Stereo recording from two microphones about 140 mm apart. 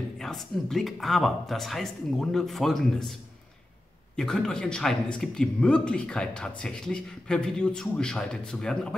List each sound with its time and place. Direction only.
0.2 s speech: centre (ahead or behind)
4.2 s speech: 5° left (ahead or behind)